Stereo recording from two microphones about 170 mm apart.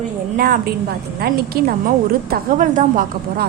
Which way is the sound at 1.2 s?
70° right (ahead or behind).